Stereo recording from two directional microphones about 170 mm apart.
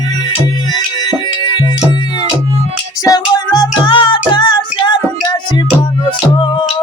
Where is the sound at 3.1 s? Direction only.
20° left (ahead or behind).